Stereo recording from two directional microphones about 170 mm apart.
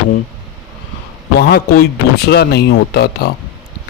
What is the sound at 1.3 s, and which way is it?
A man's voice, 70° left (ahead or behind).